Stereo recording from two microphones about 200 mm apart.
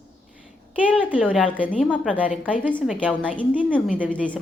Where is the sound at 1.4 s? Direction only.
5° left (ahead or behind).